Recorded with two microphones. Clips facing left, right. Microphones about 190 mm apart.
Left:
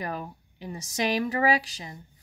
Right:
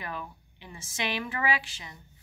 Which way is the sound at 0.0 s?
40° left (ahead or behind).